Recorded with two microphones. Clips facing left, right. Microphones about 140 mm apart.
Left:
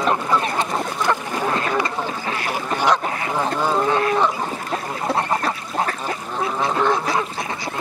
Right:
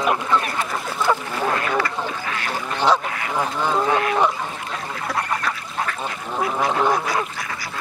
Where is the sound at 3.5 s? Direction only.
10° left (ahead or behind).